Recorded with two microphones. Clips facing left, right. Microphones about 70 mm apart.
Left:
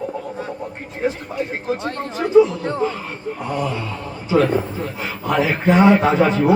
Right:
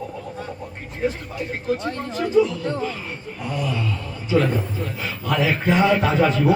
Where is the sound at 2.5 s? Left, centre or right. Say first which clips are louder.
Left 4 dB; left.